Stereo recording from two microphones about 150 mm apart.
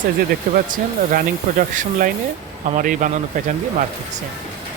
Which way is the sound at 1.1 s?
60° right (ahead or behind).